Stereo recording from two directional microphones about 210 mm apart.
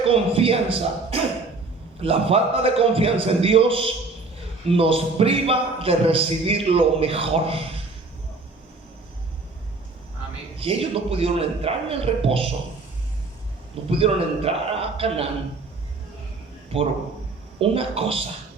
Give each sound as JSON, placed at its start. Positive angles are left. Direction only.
{"t": 0.0, "sound": "a man's voice", "side_deg": -25}
{"t": 10.6, "sound": "a man's voice", "side_deg": -25}
{"t": 13.9, "sound": "a man's voice", "side_deg": -25}
{"t": 17.6, "sound": "a man's voice", "side_deg": -25}